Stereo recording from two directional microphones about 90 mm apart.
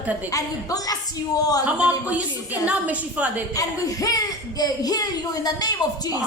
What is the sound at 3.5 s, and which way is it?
Speech, 40° left (ahead or behind).